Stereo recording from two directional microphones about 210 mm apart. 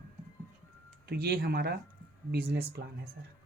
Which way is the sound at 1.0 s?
45° right (ahead or behind).